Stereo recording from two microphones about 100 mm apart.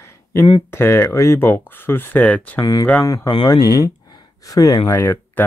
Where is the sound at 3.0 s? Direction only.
30° left (ahead or behind).